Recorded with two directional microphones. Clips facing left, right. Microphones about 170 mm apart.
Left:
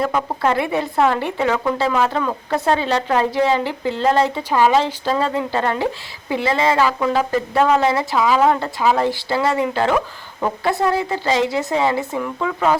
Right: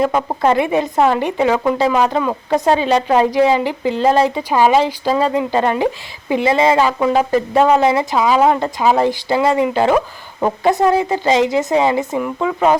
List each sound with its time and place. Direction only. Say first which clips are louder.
0.0 s a woman's voice: right 4 dB; 20° right (ahead or behind)